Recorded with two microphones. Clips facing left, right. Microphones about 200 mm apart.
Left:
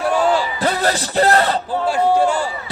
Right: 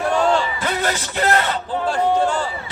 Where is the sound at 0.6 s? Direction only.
35° left (ahead or behind).